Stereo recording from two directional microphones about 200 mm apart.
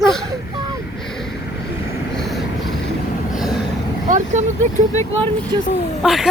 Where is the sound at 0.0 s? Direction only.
Centre (ahead or behind).